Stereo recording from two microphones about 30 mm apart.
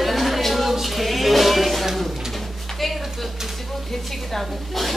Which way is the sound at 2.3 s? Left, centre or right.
Centre.